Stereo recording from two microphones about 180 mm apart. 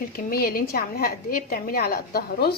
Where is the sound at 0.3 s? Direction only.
55° left (ahead or behind).